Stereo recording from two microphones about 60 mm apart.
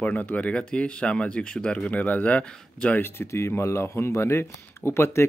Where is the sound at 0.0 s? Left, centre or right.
Left.